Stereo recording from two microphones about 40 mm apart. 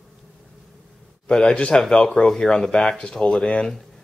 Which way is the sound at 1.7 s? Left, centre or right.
Centre.